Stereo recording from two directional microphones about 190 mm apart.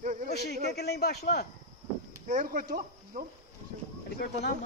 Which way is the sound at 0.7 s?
60° left (ahead or behind).